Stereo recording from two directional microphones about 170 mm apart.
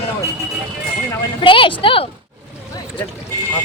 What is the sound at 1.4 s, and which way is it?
Speech, 30° left (ahead or behind).